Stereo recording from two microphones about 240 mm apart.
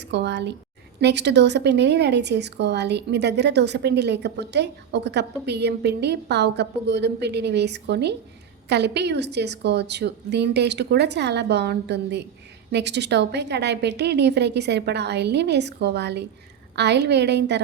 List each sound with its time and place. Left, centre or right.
0.0 s speech: right